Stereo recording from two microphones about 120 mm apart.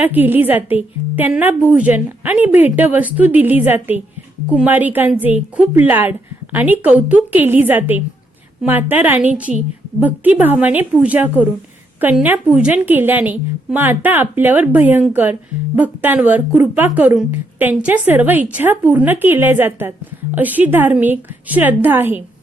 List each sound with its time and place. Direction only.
0.0 s a woman's voice: 15° right (ahead or behind)
9.5 s a woman's voice: 90° right
10.0 s a woman's voice: 15° right (ahead or behind)